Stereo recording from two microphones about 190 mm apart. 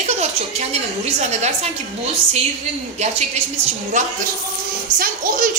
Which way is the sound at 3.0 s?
35° right (ahead or behind).